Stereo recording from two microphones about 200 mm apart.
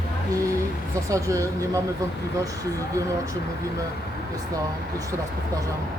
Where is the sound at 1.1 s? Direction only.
15° right (ahead or behind).